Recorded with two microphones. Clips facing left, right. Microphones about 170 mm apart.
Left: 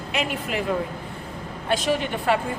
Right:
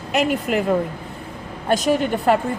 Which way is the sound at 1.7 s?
45° right (ahead or behind).